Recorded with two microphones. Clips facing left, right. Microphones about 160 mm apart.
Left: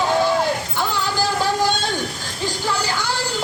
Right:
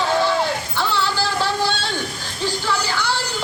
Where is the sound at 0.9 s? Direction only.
45° left (ahead or behind).